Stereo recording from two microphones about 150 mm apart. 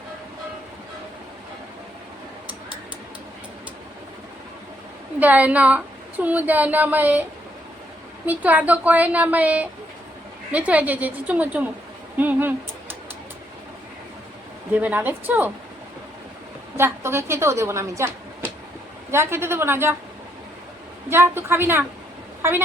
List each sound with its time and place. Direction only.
5.2 s a woman's voice: 10° right (ahead or behind)
8.3 s a woman's voice: 10° right (ahead or behind)
14.7 s a woman's voice: 10° right (ahead or behind)
16.7 s a woman's voice: 15° right (ahead or behind)
19.1 s a woman's voice: 15° right (ahead or behind)
21.1 s a woman's voice: 15° right (ahead or behind)
22.4 s a sound: 15° right (ahead or behind)